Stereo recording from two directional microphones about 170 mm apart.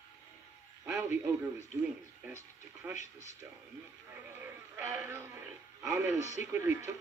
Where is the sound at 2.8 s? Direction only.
10° right (ahead or behind).